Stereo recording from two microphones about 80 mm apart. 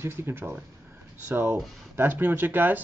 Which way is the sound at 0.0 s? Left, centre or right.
Right.